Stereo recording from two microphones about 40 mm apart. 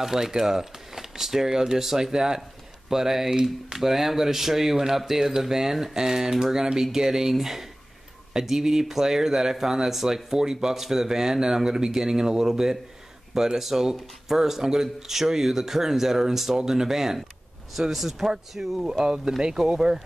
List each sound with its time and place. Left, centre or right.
0.0 s speech: centre